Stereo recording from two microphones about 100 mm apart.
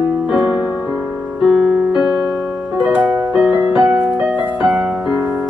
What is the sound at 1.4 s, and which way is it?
Music, 5° right (ahead or behind).